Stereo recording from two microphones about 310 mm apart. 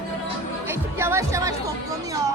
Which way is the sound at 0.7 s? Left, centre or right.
Centre.